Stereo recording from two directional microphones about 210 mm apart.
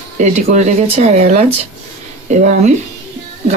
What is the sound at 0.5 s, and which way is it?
Speech, 35° right (ahead or behind).